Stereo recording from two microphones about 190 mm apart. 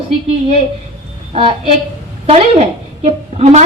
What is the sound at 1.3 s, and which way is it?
Speech, 30° right (ahead or behind).